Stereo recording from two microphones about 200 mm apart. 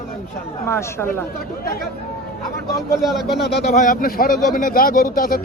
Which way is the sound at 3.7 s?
40° left (ahead or behind).